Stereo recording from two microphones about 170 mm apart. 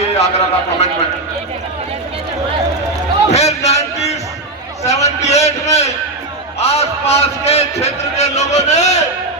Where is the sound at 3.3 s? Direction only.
40° left (ahead or behind).